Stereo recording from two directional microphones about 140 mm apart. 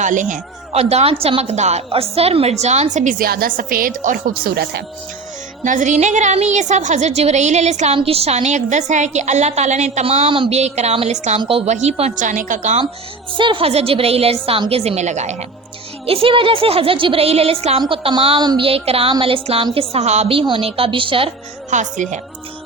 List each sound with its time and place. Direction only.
0.0 s a woman's voice: 65° right (ahead or behind); by 4.5 s 80° right
5.6 s a woman's voice: 65° right (ahead or behind)
11.3 s a woman's voice: 40° right (ahead or behind); by 12.8 s 60° right (ahead or behind)
13.3 s a woman's voice: 35° right (ahead or behind); by 15.4 s 55° right (ahead or behind)
16.0 s a woman's voice: 40° right (ahead or behind)
19.9 s a woman's voice: 55° right (ahead or behind)
21.7 s a woman's voice: 60° right (ahead or behind)